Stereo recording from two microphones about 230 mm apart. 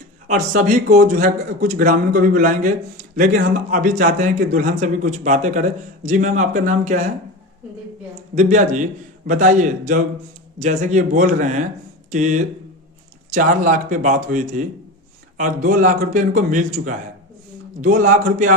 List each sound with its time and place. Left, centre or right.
0.3 s a man's voice: right
8.4 s a man's voice: right